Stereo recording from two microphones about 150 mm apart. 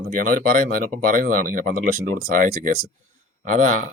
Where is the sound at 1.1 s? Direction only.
65° right (ahead or behind).